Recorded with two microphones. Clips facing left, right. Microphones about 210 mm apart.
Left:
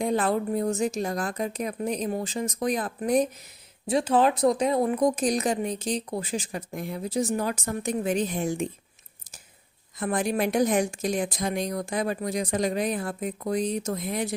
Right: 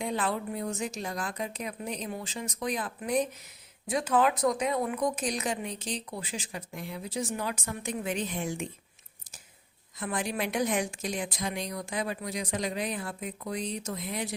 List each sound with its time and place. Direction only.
0.0 s a woman's voice: 45° left (ahead or behind)
3.8 s speech: 30° left (ahead or behind)
10.0 s a woman's voice: 45° left (ahead or behind)